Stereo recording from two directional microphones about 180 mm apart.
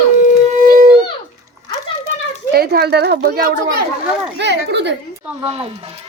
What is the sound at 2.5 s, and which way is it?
Speech, 60° right (ahead or behind).